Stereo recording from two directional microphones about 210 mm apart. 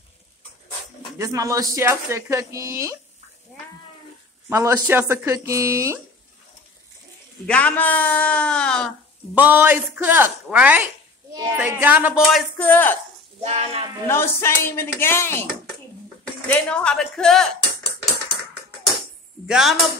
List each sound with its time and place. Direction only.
1.1 s speech: 15° right (ahead or behind)
4.5 s speech: 15° right (ahead or behind)
7.4 s a man's voice: 5° left (ahead or behind)
9.3 s speech: 10° right (ahead or behind); by 12.9 s 10° left (ahead or behind)
13.4 s speech: 30° right (ahead or behind)
14.0 s a man's voice: 10° left (ahead or behind)
16.4 s speech: 5° left (ahead or behind)
19.4 s speech: centre (ahead or behind)